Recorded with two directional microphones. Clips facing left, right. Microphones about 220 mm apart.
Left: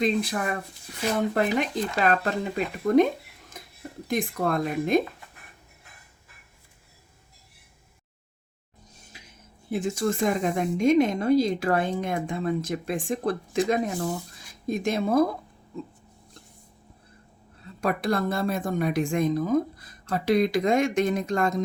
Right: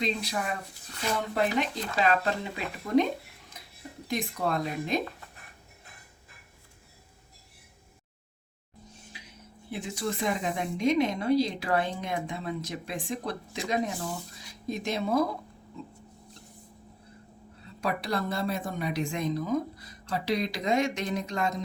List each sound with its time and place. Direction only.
0.0 s speech: 50° left (ahead or behind)
3.6 s a sound: 50° left (ahead or behind)
4.1 s speech: 50° left (ahead or behind)
9.6 s speech: 45° left (ahead or behind)
17.7 s speech: 50° left (ahead or behind)